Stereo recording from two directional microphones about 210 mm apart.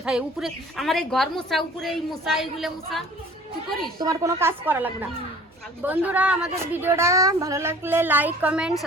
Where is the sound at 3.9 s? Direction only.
15° right (ahead or behind).